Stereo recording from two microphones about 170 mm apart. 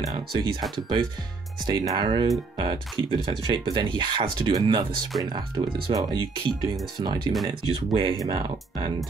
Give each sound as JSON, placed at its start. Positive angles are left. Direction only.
{"t": 0.1, "sound": "speech", "side_deg": -25}